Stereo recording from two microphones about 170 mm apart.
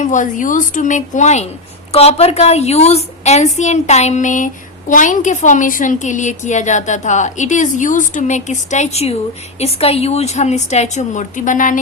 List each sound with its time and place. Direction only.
0.0 s a woman's voice: 50° left (ahead or behind)